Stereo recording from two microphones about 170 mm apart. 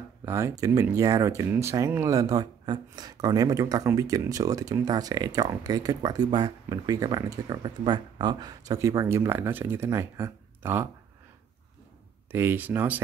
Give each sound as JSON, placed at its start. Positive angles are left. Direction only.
{"t": 0.2, "sound": "speech", "side_deg": -15}
{"t": 12.3, "sound": "speech", "side_deg": -15}